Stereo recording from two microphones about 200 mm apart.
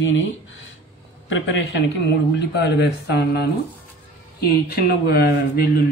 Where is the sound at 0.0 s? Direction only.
70° left (ahead or behind).